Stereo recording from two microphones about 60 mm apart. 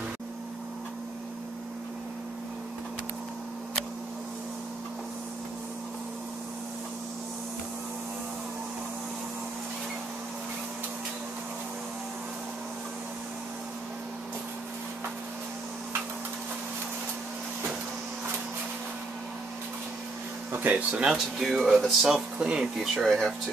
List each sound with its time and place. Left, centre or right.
20.5 s a sound: right
20.9 s speech: centre
22.0 s speech: centre
22.9 s speech: centre